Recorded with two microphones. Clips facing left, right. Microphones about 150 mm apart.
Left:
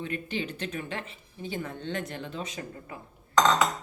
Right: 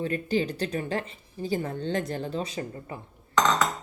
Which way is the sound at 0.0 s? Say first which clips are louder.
Right 6 dB; 35° right (ahead or behind).